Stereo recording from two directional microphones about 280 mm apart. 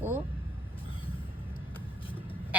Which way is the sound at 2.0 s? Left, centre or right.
Centre.